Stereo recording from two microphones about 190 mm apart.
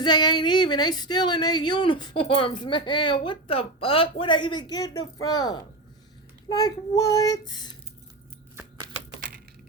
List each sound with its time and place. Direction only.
0.0 s speech: 20° left (ahead or behind)